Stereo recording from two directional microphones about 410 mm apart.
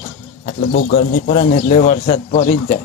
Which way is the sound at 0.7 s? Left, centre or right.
Centre.